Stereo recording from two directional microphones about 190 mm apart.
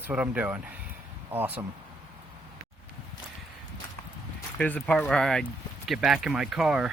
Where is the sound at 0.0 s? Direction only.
5° right (ahead or behind).